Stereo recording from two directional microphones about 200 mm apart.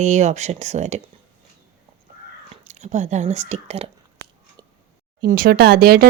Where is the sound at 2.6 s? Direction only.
35° right (ahead or behind).